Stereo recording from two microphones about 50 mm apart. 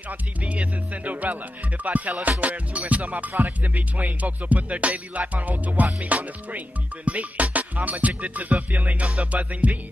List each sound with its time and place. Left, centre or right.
0.4 s music: right